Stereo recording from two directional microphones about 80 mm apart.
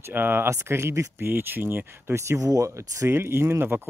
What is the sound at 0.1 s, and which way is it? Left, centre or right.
Speech, right.